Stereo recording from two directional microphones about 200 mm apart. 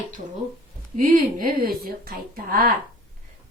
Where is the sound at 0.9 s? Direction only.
45° right (ahead or behind).